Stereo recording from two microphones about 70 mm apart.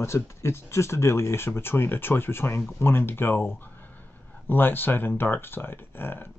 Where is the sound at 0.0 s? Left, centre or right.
Left.